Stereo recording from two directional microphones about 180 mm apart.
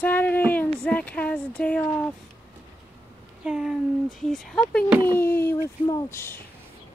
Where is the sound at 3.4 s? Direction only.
5° right (ahead or behind); by 6.4 s 15° left (ahead or behind).